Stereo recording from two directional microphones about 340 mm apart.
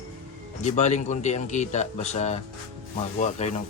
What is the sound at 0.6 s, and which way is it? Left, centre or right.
Speech, centre.